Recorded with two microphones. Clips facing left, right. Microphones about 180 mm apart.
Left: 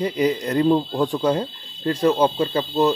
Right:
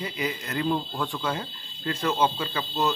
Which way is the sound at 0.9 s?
40° left (ahead or behind).